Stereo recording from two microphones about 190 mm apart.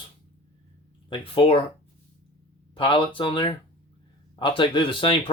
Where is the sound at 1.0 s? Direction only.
25° left (ahead or behind).